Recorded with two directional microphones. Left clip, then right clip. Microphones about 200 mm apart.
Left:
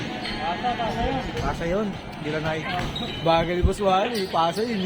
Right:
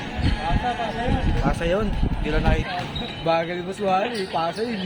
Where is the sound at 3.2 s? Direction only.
20° left (ahead or behind).